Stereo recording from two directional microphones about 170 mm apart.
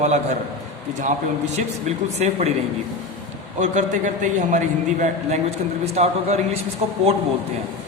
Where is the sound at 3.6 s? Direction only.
45° right (ahead or behind).